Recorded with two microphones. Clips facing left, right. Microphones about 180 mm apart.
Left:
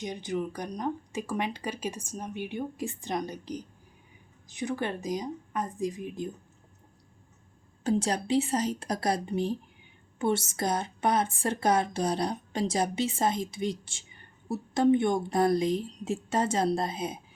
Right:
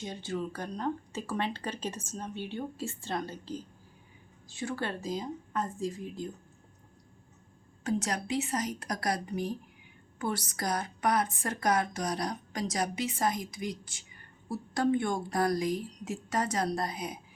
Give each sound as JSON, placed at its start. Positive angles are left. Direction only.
{"t": 0.0, "sound": "speech", "side_deg": 15}
{"t": 7.9, "sound": "speech", "side_deg": 30}